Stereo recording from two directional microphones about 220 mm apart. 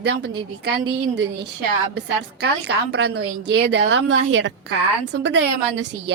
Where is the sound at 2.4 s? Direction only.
50° right (ahead or behind).